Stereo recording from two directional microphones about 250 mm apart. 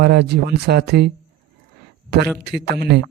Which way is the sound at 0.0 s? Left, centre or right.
Right.